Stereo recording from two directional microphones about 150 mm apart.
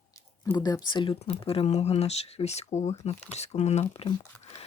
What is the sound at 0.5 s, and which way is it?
Speech, 25° left (ahead or behind).